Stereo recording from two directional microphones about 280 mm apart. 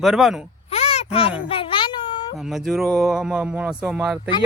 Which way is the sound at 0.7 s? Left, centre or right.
Left.